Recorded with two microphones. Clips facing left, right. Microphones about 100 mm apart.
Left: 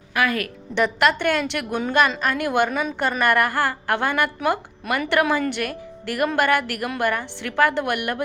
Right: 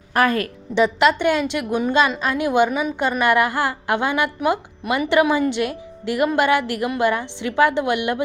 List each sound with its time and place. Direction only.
0.1 s a woman's voice: 35° right (ahead or behind)
0.8 s a woman's voice: 15° right (ahead or behind)